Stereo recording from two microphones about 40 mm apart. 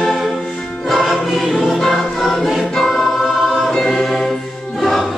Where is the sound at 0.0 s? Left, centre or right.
Centre.